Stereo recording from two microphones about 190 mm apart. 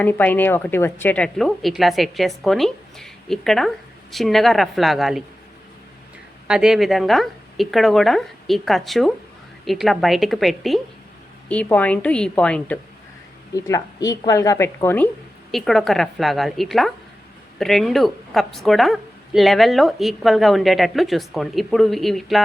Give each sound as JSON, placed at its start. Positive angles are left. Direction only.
{"t": 0.0, "sound": "a woman's voice", "side_deg": 10}
{"t": 6.5, "sound": "a woman's voice", "side_deg": -5}
{"t": 13.5, "sound": "a woman's voice", "side_deg": 15}